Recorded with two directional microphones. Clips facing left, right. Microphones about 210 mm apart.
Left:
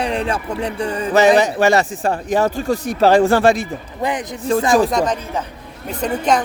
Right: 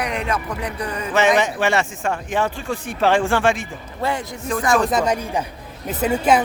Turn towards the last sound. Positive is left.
turn(degrees=-5)  # may be behind; listen again after turning